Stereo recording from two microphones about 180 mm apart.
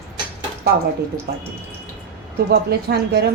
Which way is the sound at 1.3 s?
65° right (ahead or behind).